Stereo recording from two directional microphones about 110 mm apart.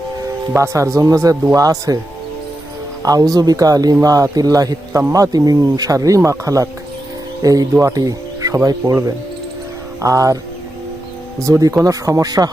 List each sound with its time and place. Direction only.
0.5 s speech: 25° right (ahead or behind)
3.0 s speech: 35° right (ahead or behind)
11.3 s speech: 30° right (ahead or behind)